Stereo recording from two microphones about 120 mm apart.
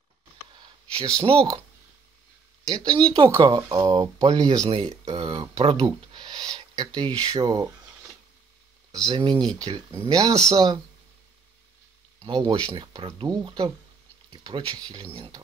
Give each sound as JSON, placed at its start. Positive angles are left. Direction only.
{"t": 0.6, "sound": "a sound", "side_deg": -30}
{"t": 2.7, "sound": "speech", "side_deg": -35}
{"t": 4.6, "sound": "speech", "side_deg": -60}
{"t": 5.1, "sound": "speech", "side_deg": -35}
{"t": 8.9, "sound": "speech", "side_deg": -30}
{"t": 12.3, "sound": "speech", "side_deg": -35}